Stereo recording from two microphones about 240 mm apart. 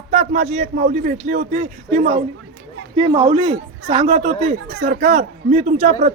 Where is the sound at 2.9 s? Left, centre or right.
Centre.